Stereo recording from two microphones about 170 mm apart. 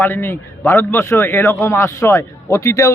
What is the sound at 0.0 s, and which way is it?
A man's voice, 10° left (ahead or behind).